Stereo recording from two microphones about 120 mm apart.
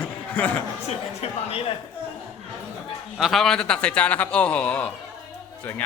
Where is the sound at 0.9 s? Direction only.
60° left (ahead or behind).